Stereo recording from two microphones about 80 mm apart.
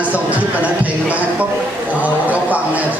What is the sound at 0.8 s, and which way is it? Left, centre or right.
A man's voice, centre.